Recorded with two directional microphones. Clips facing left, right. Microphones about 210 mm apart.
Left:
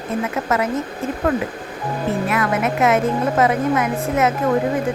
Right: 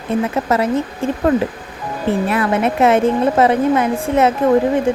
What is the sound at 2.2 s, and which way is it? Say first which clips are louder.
A woman's voice: right 3 dB; 30° right (ahead or behind).